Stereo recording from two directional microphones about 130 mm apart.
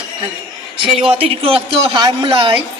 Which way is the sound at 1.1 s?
45° right (ahead or behind).